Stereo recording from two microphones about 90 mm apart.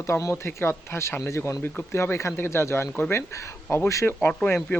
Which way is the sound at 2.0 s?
30° left (ahead or behind).